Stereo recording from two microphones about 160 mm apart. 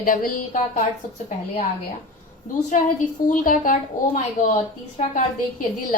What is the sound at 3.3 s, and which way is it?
Speech, 60° left (ahead or behind).